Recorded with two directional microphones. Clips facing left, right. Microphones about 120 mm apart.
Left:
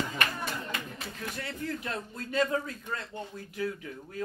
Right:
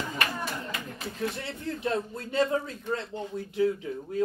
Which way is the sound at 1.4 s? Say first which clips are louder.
Right 3 dB; 25° right (ahead or behind).